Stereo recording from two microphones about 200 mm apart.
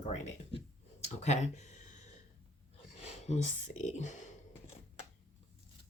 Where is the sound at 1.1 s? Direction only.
35° left (ahead or behind).